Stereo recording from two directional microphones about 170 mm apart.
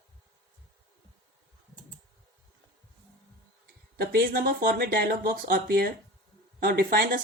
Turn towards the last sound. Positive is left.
turn(degrees=-60)  # may be behind; listen again after turning